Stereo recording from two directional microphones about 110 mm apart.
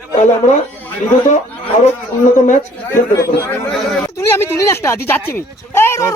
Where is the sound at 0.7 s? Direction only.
15° left (ahead or behind).